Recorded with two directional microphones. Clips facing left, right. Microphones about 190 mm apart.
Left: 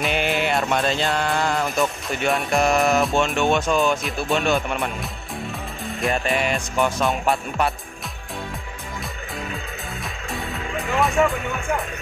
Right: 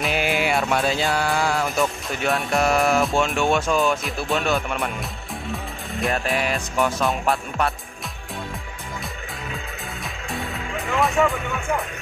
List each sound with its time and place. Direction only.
0.0 s music: centre (ahead or behind)
2.8 s speech: 5° left (ahead or behind)
5.9 s speech: centre (ahead or behind)